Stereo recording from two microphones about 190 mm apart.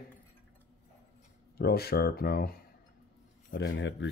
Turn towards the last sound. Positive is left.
turn(degrees=70)  # may be behind; listen again after turning